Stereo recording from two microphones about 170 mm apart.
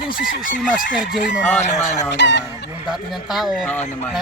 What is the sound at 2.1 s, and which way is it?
Chicken, 90° left.